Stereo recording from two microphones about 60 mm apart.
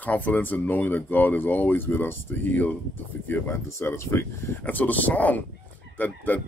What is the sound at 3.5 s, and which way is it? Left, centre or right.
Speech, left.